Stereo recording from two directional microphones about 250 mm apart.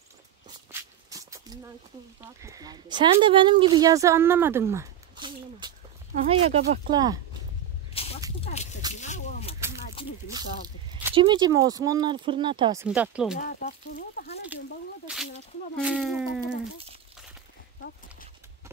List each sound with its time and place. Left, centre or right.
0.7 s shuffle: centre
2.4 s speech: centre
7.9 s a sound: left
10.9 s speech: centre
12.8 s speech: centre
13.4 s speech: left
15.8 s speech: centre